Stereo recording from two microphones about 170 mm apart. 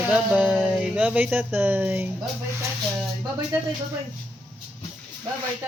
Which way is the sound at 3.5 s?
10° right (ahead or behind).